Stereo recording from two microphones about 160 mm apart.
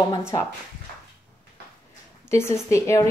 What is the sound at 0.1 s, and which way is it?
Speech, 20° left (ahead or behind).